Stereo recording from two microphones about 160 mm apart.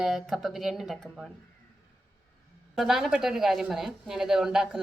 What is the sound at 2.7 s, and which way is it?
Speech, centre (ahead or behind).